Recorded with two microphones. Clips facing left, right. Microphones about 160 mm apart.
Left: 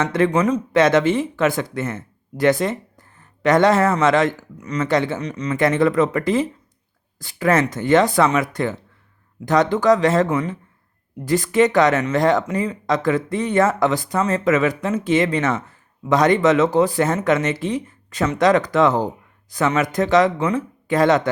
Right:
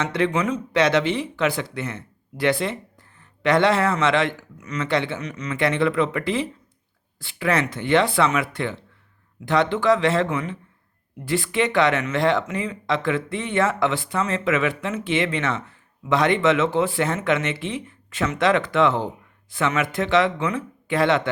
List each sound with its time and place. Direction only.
0.0 s a man's voice: 45° left (ahead or behind)